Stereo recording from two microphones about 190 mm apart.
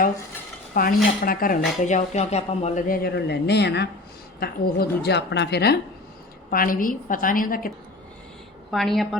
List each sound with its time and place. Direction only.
0.7 s dishes: 50° left (ahead or behind)
1.2 s a woman's voice: 50° left (ahead or behind)
6.5 s speech: 45° left (ahead or behind)
8.7 s a woman's voice: centre (ahead or behind)